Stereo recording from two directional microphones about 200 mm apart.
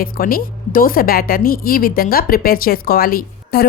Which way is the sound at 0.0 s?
45° left (ahead or behind).